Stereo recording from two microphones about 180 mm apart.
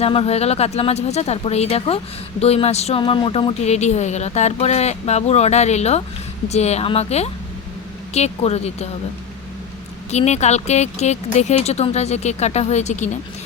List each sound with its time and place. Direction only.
0.0 s a woman's voice: 35° left (ahead or behind)
10.1 s a woman's voice: 40° left (ahead or behind)